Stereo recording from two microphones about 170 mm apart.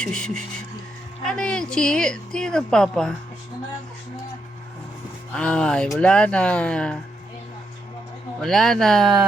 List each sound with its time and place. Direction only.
0.0 s speech: 5° left (ahead or behind)
5.3 s speech: 5° left (ahead or behind)
8.4 s speech: centre (ahead or behind)